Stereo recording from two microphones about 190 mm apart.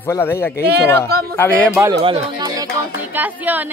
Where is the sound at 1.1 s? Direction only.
55° right (ahead or behind).